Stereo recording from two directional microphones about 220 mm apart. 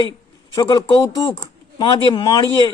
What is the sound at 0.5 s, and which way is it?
A man's voice, 15° left (ahead or behind).